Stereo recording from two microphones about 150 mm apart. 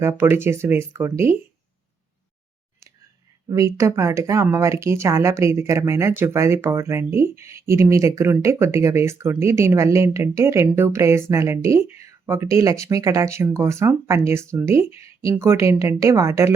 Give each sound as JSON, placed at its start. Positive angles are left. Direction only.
{"t": 0.0, "sound": "speech", "side_deg": -15}
{"t": 3.5, "sound": "speech", "side_deg": -20}